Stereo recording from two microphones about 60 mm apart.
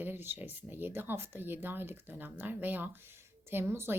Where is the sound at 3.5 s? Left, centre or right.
Right.